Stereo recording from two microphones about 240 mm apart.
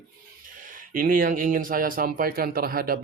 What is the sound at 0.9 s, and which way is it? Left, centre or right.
Speech, right.